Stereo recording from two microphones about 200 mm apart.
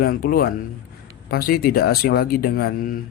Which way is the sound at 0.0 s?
45° left (ahead or behind).